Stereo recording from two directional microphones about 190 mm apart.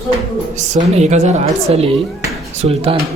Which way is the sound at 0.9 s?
35° right (ahead or behind).